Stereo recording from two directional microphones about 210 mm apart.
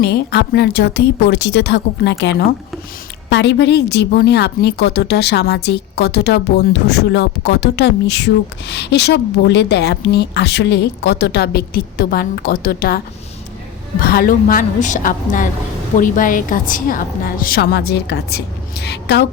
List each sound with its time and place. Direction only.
0.0 s a woman's voice: 50° left (ahead or behind)
14.0 s a woman's voice: 45° left (ahead or behind)